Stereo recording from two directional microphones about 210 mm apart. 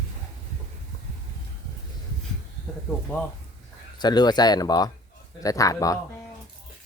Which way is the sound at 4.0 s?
20° left (ahead or behind).